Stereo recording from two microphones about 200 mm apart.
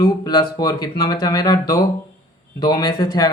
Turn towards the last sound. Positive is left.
turn(degrees=20)  # may be behind; listen again after turning